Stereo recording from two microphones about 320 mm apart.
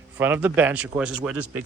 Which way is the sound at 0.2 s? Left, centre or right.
Centre.